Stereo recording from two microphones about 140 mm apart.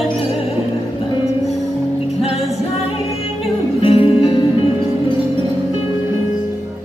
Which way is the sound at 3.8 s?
40° left (ahead or behind).